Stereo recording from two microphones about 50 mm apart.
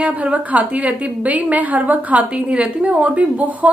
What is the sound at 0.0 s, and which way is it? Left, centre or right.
A woman's voice, right.